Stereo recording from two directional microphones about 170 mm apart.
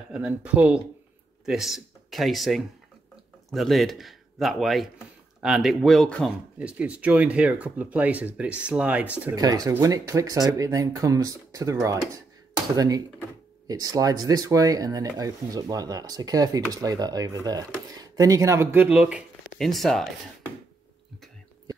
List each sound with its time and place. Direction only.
0.1 s speech: 5° right (ahead or behind)
6.6 s speech: 5° right (ahead or behind)
9.3 s speech: 20° right (ahead or behind); by 20.1 s centre (ahead or behind)